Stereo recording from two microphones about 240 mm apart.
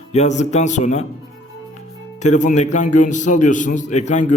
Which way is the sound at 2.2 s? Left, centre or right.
Left.